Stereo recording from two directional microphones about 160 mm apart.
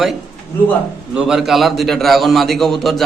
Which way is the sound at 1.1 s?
5° right (ahead or behind).